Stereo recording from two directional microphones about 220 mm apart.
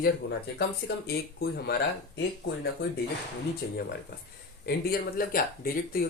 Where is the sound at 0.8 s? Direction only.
55° left (ahead or behind).